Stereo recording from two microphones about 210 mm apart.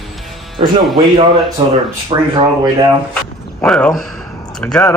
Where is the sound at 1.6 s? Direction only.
25° right (ahead or behind).